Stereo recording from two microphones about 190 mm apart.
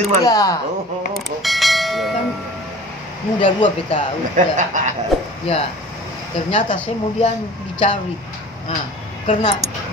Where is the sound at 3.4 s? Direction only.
25° left (ahead or behind).